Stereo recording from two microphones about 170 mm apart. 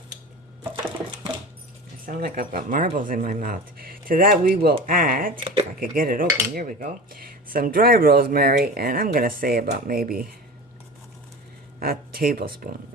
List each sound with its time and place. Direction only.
2.0 s cutlery: 55° right (ahead or behind)
5.3 s speech: 30° right (ahead or behind)
5.8 s cutlery: 55° right (ahead or behind)
11.8 s cutlery: 60° right (ahead or behind)